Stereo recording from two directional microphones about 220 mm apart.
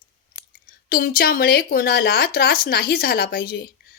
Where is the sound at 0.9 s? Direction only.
40° left (ahead or behind).